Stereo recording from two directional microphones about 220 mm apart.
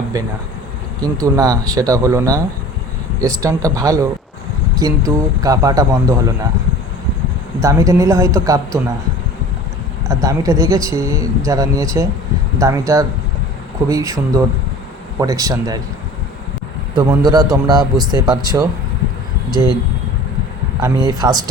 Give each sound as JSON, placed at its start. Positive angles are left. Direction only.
{"t": 1.2, "sound": "speech", "side_deg": -15}
{"t": 7.6, "sound": "speech", "side_deg": -15}
{"t": 10.1, "sound": "speech", "side_deg": -15}
{"t": 16.9, "sound": "speech", "side_deg": -20}
{"t": 20.8, "sound": "speech", "side_deg": -15}